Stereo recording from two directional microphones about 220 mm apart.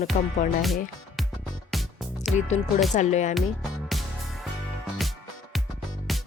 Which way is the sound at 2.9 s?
35° left (ahead or behind).